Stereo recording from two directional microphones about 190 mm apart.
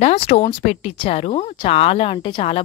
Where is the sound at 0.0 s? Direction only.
35° left (ahead or behind).